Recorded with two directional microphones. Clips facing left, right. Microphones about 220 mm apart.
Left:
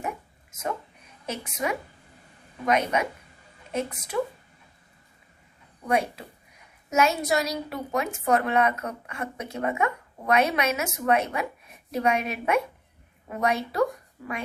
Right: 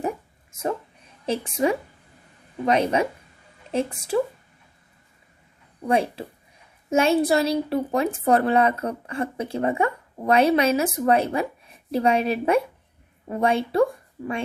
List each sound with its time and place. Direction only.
0.5 s a sound: 30° right (ahead or behind)
1.3 s a woman's voice: 30° right (ahead or behind)
5.9 s a woman's voice: 30° right (ahead or behind)